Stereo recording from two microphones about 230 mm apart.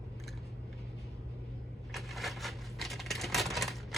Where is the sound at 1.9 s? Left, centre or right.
Centre.